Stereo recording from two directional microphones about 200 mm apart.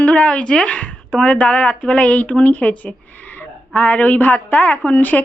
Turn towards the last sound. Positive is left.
turn(degrees=10)  # may be behind; listen again after turning